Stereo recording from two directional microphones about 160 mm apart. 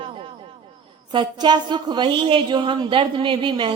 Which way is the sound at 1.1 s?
30° right (ahead or behind).